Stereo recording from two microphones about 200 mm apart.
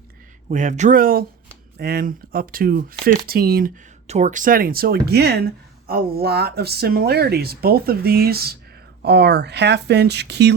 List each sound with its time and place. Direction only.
0.4 s speech: 35° right (ahead or behind)
4.0 s speech: 35° right (ahead or behind); by 10.5 s 55° right (ahead or behind)